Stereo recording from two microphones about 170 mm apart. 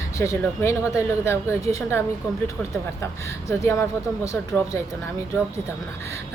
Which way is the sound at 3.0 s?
15° left (ahead or behind).